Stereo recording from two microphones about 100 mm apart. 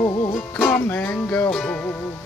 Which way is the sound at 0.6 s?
20° left (ahead or behind).